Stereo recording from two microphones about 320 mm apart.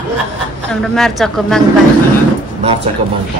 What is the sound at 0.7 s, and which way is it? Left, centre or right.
Speech, centre.